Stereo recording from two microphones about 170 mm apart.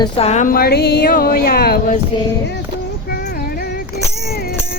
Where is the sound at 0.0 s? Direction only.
35° left (ahead or behind); by 1.8 s 65° left (ahead or behind).